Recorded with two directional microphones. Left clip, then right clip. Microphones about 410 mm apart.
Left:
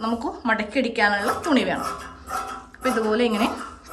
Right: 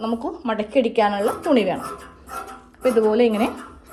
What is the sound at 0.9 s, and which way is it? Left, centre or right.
Speech, centre.